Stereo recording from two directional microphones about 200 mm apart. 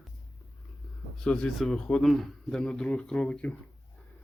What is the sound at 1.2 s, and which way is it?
Speech, 5° left (ahead or behind).